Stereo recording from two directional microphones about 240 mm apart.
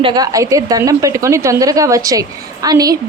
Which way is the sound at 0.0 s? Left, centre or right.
Centre.